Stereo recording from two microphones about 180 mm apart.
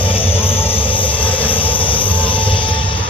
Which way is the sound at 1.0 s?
10° left (ahead or behind).